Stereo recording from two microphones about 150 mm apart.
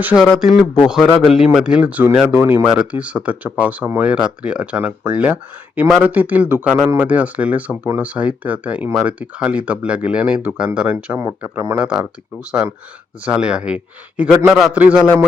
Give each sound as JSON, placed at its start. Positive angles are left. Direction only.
{"t": 0.0, "sound": "a man's voice", "side_deg": -10}